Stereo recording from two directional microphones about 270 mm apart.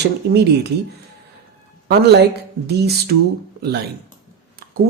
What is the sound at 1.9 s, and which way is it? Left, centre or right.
Speech, right.